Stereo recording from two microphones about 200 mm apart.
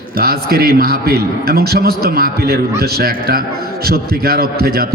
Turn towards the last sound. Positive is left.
turn(degrees=-50)  # may be behind; listen again after turning